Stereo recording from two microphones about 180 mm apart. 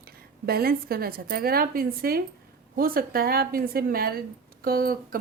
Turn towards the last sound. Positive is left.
turn(degrees=-55)  # may be behind; listen again after turning